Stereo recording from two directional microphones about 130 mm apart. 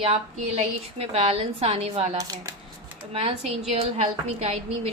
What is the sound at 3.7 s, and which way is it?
Speech, 55° right (ahead or behind).